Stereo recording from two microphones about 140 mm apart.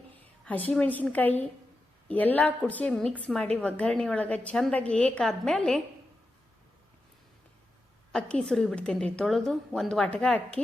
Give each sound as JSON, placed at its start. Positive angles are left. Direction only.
{"t": 0.4, "sound": "a woman's voice", "side_deg": 10}
{"t": 8.1, "sound": "a woman's voice", "side_deg": 5}